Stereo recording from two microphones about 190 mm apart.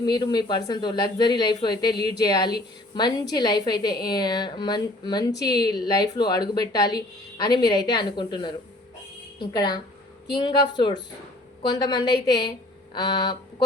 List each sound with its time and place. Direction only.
0.0 s a woman's voice: 20° left (ahead or behind)